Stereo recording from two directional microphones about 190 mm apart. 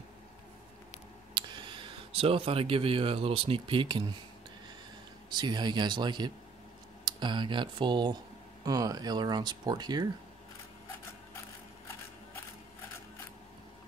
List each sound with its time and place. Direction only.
1.3 s speech: 25° right (ahead or behind)
5.3 s speech: 25° right (ahead or behind)